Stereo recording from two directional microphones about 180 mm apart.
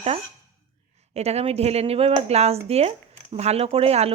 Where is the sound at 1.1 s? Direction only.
35° right (ahead or behind).